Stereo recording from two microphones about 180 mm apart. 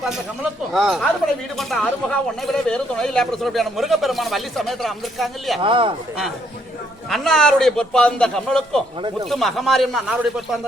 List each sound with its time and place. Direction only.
0.0 s speech: centre (ahead or behind)
5.6 s speech: 30° right (ahead or behind)
7.1 s speech: centre (ahead or behind)